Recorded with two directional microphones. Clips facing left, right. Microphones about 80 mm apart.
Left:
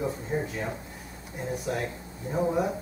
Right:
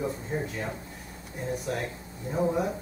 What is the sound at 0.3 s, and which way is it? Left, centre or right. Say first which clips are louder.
Speech: left 3 dB; centre.